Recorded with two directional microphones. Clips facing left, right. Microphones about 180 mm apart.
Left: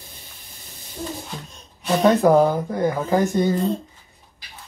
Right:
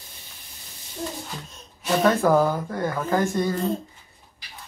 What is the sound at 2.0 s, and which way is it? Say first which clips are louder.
Speech: left 4 dB; 20° left (ahead or behind).